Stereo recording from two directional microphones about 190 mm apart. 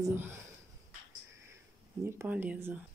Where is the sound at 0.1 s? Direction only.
10° right (ahead or behind).